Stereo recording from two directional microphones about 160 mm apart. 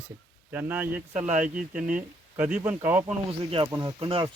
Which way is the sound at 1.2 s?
50° right (ahead or behind).